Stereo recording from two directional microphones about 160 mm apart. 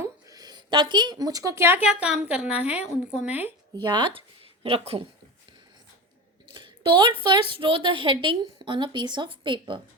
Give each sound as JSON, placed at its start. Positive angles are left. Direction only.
{"t": 0.0, "sound": "a woman's voice", "side_deg": -20}
{"t": 3.8, "sound": "a woman's voice", "side_deg": -30}
{"t": 6.5, "sound": "a sound", "side_deg": -30}
{"t": 7.5, "sound": "a woman's voice", "side_deg": -30}